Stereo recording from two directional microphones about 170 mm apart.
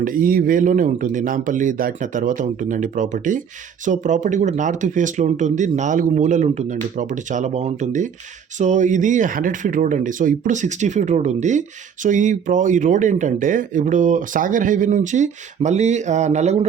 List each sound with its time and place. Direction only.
0.0 s speech: 55° right (ahead or behind)